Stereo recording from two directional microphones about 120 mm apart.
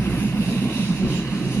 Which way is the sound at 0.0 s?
15° left (ahead or behind).